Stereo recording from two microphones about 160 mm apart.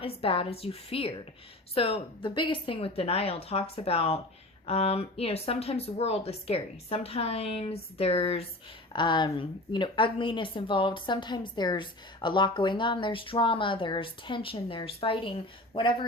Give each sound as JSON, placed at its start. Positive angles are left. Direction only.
{"t": 0.0, "sound": "a woman's voice", "side_deg": 35}